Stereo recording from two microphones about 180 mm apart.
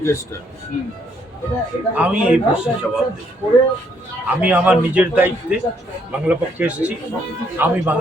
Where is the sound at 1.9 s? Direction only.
10° right (ahead or behind).